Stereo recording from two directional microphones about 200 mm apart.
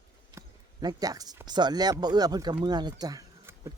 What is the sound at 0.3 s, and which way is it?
Speech, 20° right (ahead or behind).